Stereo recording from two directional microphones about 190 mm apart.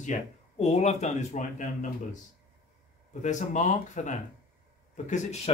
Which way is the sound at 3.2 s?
40° left (ahead or behind).